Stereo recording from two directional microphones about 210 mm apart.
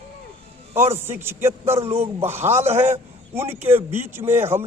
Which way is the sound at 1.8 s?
30° right (ahead or behind).